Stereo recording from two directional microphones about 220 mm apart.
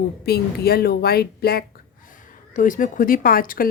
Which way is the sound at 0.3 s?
45° left (ahead or behind).